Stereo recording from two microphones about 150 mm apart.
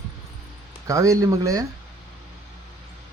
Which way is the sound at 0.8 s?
20° right (ahead or behind).